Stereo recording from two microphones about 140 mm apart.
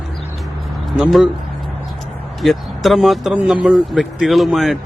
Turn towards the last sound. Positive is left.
turn(degrees=0)  # may be behind; listen again after turning